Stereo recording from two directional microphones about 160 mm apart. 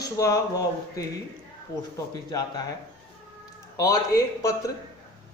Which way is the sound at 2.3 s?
25° left (ahead or behind).